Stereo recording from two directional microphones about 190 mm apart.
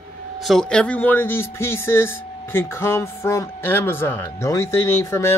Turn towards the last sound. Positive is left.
turn(degrees=15)  # may be behind; listen again after turning